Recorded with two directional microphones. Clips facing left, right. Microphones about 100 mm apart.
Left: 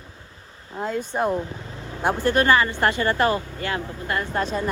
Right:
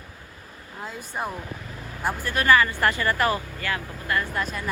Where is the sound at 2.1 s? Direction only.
30° left (ahead or behind).